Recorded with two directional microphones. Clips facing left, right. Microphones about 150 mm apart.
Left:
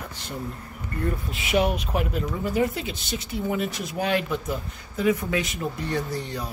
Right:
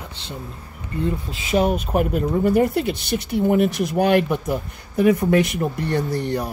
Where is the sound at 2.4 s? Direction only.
60° right (ahead or behind).